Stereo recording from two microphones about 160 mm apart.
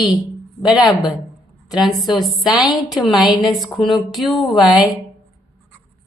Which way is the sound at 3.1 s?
Centre (ahead or behind).